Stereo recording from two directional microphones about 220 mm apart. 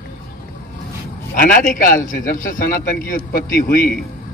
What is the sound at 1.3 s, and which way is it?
A man's voice, 40° left (ahead or behind).